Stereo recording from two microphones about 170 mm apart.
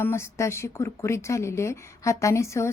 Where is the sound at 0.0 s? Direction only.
15° left (ahead or behind).